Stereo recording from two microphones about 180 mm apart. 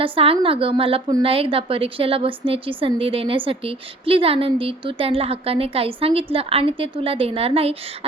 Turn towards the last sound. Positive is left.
turn(degrees=-30)  # may be behind; listen again after turning